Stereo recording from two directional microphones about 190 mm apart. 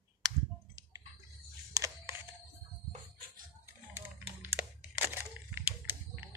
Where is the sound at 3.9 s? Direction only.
10° right (ahead or behind).